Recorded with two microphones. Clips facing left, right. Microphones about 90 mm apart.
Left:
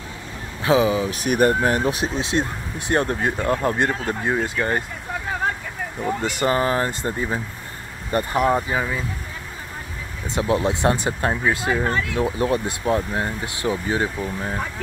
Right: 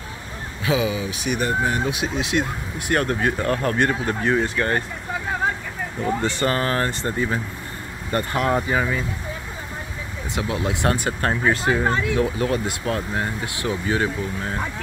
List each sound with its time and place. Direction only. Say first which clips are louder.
0.7 s speech: left 4 dB; 35° left (ahead or behind)
2.9 s speech: even; 20° left (ahead or behind)
6.2 s speech: left 4 dB; 15° left (ahead or behind)
10.3 s speech: left 4 dB; 30° left (ahead or behind)
11.6 s speech: right 1 dB; 20° right (ahead or behind)
12.2 s speech: even; 25° left (ahead or behind)